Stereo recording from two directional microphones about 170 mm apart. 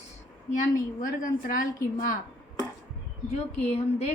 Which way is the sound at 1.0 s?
55° left (ahead or behind).